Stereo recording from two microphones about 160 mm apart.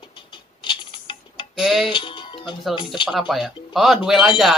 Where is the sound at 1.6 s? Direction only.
Centre (ahead or behind).